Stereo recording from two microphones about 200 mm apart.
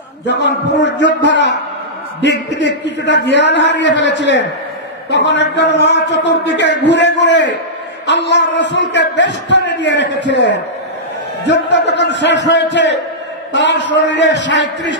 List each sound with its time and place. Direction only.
0.3 s a man's voice: 60° left (ahead or behind)